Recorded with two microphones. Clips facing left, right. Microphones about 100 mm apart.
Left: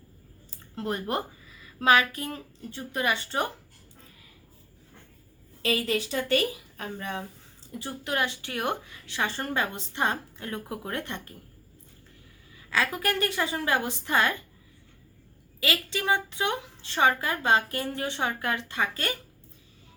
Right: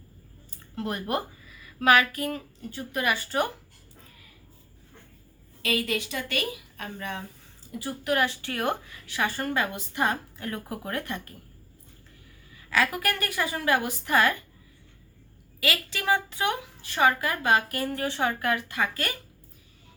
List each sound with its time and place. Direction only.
0.8 s a woman's voice: 30° left (ahead or behind)
5.6 s a woman's voice: 30° left (ahead or behind)
12.7 s a woman's voice: 25° left (ahead or behind)
15.6 s a woman's voice: 25° left (ahead or behind)